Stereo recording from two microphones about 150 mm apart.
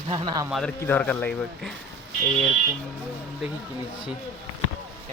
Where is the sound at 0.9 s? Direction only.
10° left (ahead or behind).